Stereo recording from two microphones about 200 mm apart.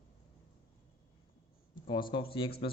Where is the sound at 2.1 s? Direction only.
25° left (ahead or behind).